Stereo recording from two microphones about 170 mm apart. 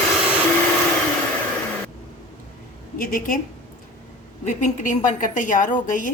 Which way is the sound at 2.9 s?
55° left (ahead or behind).